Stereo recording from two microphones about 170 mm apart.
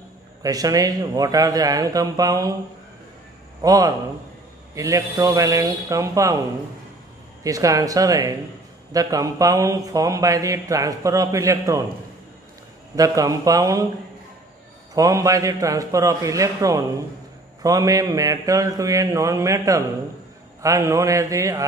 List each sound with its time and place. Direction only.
0.4 s speech: 20° right (ahead or behind)
3.6 s speech: 20° right (ahead or behind)
7.4 s speech: 20° right (ahead or behind)
12.9 s speech: 20° right (ahead or behind)
15.0 s speech: 20° right (ahead or behind)